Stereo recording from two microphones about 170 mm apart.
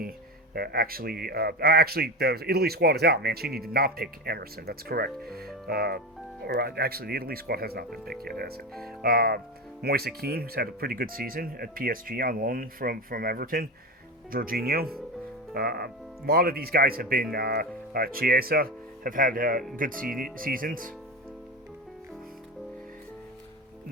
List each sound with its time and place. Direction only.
0.5 s speech: 60° right (ahead or behind)
8.7 s speech: centre (ahead or behind)
9.0 s speech: 65° right (ahead or behind)